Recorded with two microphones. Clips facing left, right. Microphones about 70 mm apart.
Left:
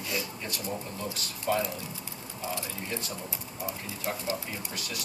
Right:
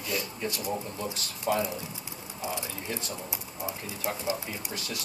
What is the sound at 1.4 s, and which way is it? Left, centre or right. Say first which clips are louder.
Speech: right 1 dB; right.